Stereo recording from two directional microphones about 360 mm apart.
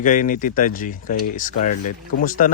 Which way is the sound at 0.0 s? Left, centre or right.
Left.